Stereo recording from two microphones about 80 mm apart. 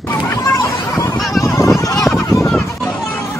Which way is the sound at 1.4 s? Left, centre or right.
Left.